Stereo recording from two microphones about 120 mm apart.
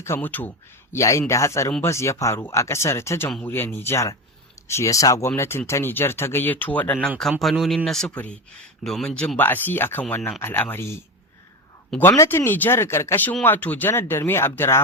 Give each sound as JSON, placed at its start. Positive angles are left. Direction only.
{"t": 0.0, "sound": "speech", "side_deg": 15}
{"t": 7.2, "sound": "a man's voice", "side_deg": 0}